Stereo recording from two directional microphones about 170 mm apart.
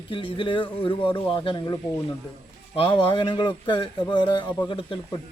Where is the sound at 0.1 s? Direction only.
30° left (ahead or behind).